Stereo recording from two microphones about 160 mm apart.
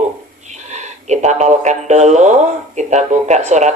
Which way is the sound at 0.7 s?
45° right (ahead or behind).